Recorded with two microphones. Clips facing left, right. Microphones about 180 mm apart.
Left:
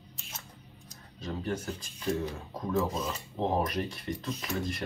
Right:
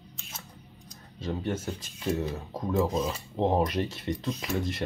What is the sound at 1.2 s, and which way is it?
Speech, 25° right (ahead or behind).